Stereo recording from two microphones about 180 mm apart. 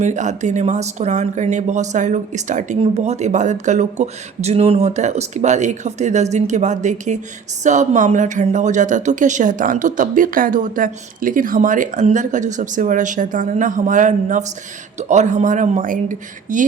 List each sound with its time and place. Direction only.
0.0 s a woman's voice: 40° right (ahead or behind)